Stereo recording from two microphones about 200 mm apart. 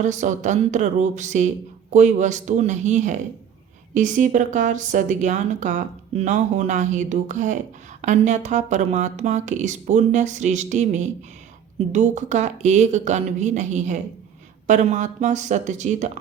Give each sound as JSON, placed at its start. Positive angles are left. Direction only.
{"t": 0.0, "sound": "a woman's voice", "side_deg": -35}